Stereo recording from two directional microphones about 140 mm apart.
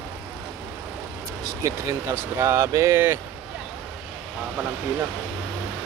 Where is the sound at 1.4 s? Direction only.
25° right (ahead or behind).